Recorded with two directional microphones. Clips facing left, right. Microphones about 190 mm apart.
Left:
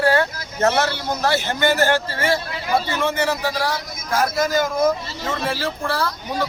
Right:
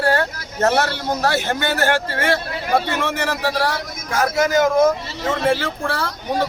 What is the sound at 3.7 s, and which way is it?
A man's voice, 75° right (ahead or behind).